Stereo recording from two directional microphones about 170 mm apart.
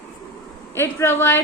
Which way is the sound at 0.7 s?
15° left (ahead or behind).